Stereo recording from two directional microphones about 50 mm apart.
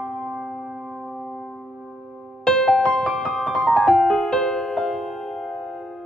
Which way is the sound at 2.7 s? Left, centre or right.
Left.